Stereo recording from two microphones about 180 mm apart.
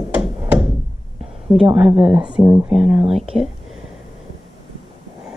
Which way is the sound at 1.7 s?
5° right (ahead or behind).